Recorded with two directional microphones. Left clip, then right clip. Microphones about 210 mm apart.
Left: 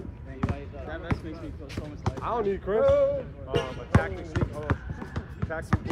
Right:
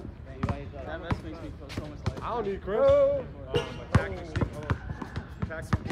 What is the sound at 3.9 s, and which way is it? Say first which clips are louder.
Speech: left 4 dB; 5° left (ahead or behind).